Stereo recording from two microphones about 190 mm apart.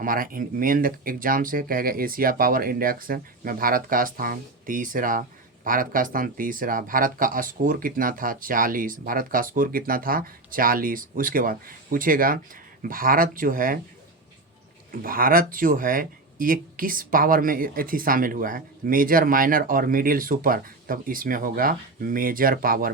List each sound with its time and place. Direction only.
0.0 s speech: 45° right (ahead or behind)
15.0 s speech: 50° right (ahead or behind)